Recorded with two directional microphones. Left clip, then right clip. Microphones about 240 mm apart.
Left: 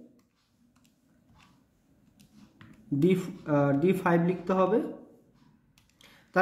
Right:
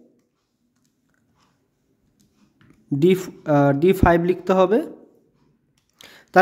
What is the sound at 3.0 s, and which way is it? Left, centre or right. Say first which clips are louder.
Speech: right 9 dB; right.